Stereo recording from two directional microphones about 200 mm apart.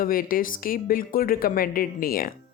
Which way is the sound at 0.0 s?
45° left (ahead or behind).